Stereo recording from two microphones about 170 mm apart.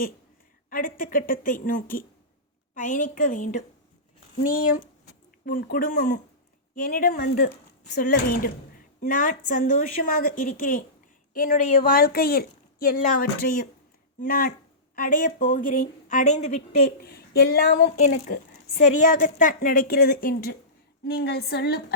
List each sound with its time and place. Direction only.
0.7 s a woman's voice: 55° left (ahead or behind)
17.0 s a woman's voice: 65° left (ahead or behind)